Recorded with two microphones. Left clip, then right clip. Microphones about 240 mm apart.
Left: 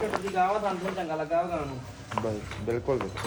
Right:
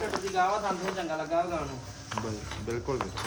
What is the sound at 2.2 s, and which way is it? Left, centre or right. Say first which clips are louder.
Speech: left 5 dB; centre.